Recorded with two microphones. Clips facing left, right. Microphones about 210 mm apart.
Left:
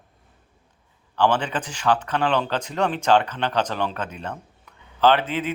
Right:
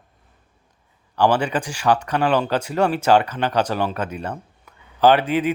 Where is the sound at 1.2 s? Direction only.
10° right (ahead or behind).